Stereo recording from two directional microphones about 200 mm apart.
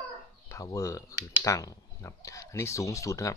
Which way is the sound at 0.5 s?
15° left (ahead or behind).